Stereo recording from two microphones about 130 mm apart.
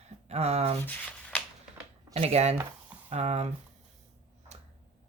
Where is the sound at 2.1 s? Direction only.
55° right (ahead or behind).